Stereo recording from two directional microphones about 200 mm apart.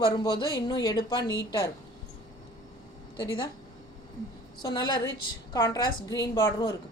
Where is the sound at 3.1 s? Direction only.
20° left (ahead or behind).